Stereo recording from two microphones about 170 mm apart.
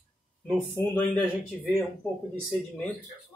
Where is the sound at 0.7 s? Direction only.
10° left (ahead or behind).